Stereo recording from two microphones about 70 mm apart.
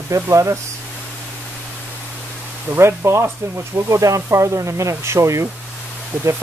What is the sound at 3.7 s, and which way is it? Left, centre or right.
Speech, right.